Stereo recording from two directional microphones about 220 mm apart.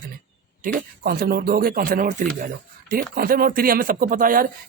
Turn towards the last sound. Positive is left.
turn(degrees=-40)  # may be behind; listen again after turning